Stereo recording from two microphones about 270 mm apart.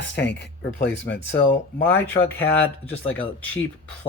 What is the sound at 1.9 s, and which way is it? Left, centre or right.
Speech, centre.